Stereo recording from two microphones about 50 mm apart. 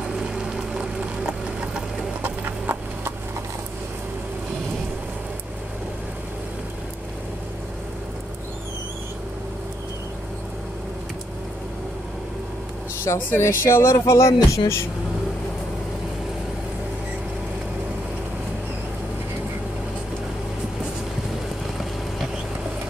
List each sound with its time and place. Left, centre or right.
2.2 s a sound: right
13.1 s speech: left
13.4 s speech: left